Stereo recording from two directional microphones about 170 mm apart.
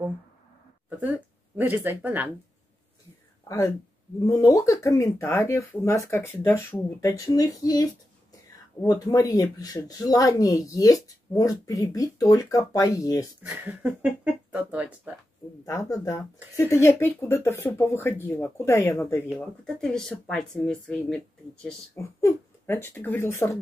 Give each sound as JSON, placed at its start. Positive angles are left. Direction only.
{"t": 1.6, "sound": "speech", "side_deg": -10}
{"t": 3.4, "sound": "speech", "side_deg": 20}
{"t": 8.8, "sound": "speech", "side_deg": 20}
{"t": 13.4, "sound": "speech", "side_deg": -10}
{"t": 15.6, "sound": "speech", "side_deg": 20}
{"t": 19.2, "sound": "speech", "side_deg": 0}